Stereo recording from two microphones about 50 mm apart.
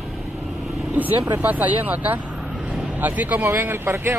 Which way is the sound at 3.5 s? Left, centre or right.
Right.